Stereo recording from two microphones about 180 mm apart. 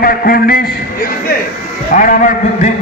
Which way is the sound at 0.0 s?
55° left (ahead or behind).